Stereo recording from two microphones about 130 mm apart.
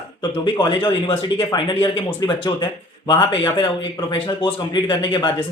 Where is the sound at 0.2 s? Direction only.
35° left (ahead or behind).